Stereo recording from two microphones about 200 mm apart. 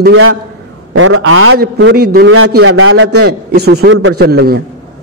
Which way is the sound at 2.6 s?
90° right.